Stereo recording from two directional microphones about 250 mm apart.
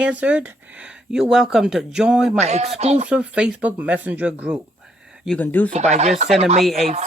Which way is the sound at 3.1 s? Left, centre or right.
Centre.